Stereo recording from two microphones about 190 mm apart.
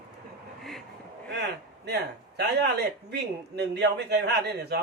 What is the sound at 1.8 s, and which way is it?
A man's voice, 60° right (ahead or behind).